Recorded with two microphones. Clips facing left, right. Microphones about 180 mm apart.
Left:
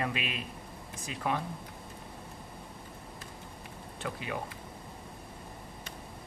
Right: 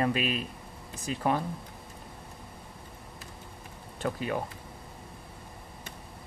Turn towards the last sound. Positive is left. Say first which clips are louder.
# right 6 dB
turn(degrees=-45)  # may be behind; listen again after turning